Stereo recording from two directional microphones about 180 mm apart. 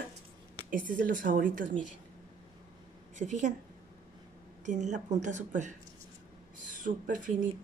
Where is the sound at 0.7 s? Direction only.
50° right (ahead or behind).